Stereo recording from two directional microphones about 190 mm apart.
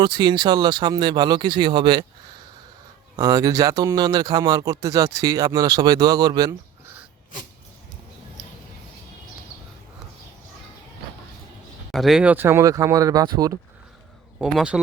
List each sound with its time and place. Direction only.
0.0 s speech: 25° right (ahead or behind)
3.2 s speech: 20° right (ahead or behind)
11.9 s speech: centre (ahead or behind); by 13.6 s 20° right (ahead or behind)
14.3 s speech: 5° right (ahead or behind)